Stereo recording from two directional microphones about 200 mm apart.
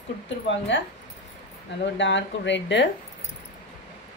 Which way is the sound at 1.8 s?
65° left (ahead or behind).